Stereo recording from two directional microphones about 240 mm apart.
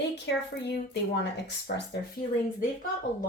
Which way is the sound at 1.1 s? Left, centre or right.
Left.